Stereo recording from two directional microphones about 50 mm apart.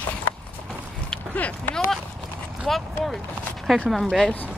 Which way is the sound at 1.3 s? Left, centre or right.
Left.